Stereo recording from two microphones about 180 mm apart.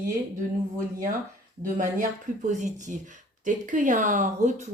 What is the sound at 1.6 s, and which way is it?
Speech, 50° right (ahead or behind).